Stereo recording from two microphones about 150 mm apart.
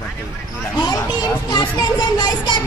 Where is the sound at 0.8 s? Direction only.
25° left (ahead or behind).